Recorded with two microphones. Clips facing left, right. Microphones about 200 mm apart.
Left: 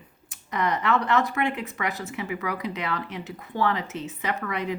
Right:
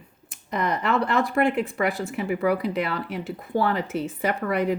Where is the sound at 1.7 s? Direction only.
30° right (ahead or behind).